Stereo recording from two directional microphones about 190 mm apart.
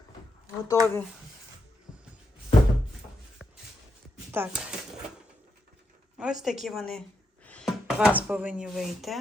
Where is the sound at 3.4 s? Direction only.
5° right (ahead or behind).